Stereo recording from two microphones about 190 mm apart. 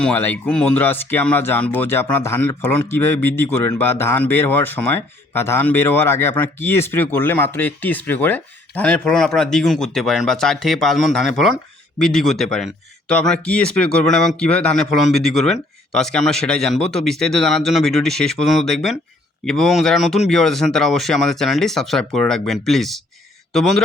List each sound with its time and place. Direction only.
0.0 s speech: 10° left (ahead or behind)